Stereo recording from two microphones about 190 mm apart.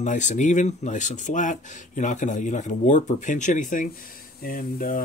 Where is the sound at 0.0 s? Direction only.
40° left (ahead or behind).